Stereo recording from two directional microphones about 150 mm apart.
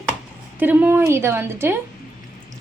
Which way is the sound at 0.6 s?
10° right (ahead or behind).